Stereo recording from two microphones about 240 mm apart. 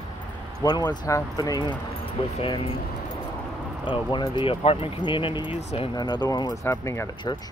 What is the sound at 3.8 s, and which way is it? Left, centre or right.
Speech, left.